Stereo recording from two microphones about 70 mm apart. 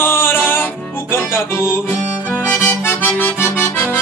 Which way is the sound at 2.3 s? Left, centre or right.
Left.